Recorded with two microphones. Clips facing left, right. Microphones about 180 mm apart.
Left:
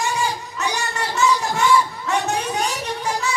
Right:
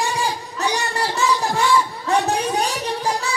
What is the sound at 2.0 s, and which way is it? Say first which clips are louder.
Music: right 3 dB; 35° right (ahead or behind).